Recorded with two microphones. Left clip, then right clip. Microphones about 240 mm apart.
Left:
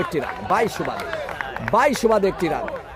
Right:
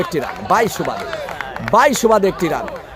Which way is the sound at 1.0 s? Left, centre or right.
Right.